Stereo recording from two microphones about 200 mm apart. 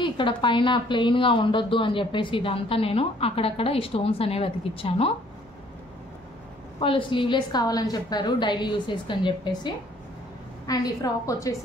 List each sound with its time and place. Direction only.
0.0 s a woman's voice: 25° left (ahead or behind)
6.8 s a woman's voice: 25° left (ahead or behind)
10.7 s a woman's voice: 20° left (ahead or behind)